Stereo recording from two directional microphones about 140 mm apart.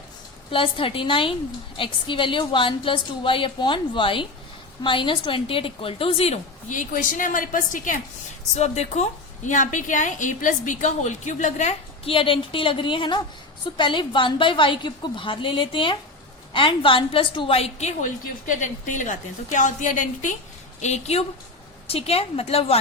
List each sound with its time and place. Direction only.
0.5 s a woman's voice: 40° left (ahead or behind)
6.7 s a woman's voice: 70° left (ahead or behind)
8.5 s a woman's voice: 55° left (ahead or behind)
9.5 s a woman's voice: 65° left (ahead or behind)
20.8 s a woman's voice: 50° left (ahead or behind)